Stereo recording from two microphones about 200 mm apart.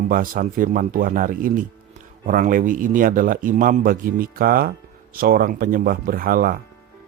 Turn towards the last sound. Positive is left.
turn(degrees=-45)  # may be behind; listen again after turning